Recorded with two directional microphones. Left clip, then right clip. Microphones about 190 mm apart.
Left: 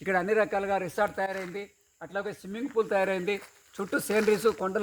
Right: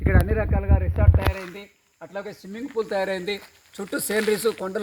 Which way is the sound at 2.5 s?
15° right (ahead or behind).